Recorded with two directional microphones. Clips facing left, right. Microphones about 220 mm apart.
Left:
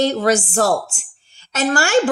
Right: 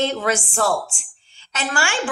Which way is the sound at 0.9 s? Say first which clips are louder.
Left 4 dB; 40° left (ahead or behind).